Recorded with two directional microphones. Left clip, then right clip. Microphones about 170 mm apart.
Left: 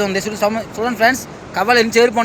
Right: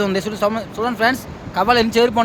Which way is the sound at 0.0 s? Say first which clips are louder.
Left 1 dB; 15° right (ahead or behind).